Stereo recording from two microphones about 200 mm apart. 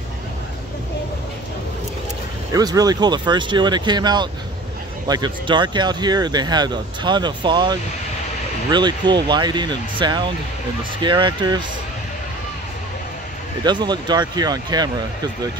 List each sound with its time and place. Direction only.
2.5 s speech: 20° right (ahead or behind)
13.7 s speech: 20° right (ahead or behind)